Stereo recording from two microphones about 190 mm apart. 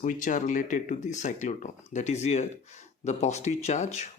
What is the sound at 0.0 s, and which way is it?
Speech, 45° left (ahead or behind).